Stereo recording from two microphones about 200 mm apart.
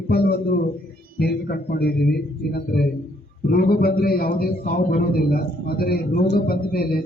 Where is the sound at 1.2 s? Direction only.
50° left (ahead or behind).